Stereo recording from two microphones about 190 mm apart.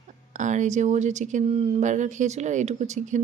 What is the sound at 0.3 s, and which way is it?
A woman's voice, 40° right (ahead or behind).